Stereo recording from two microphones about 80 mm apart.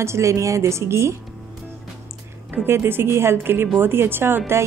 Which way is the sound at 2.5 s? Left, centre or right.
Right.